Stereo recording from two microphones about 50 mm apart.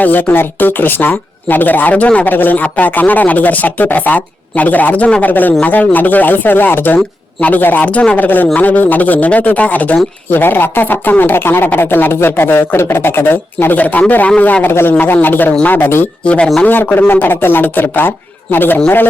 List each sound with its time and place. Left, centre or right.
0.0 s speech: left
5.3 s speech: left
10.4 s speech: left
14.6 s speech: left
16.2 s speech: left
16.6 s speech: left